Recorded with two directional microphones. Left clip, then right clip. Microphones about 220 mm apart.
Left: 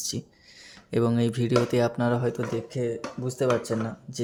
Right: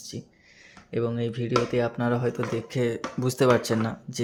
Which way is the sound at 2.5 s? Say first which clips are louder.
Right 2 dB; 10° right (ahead or behind).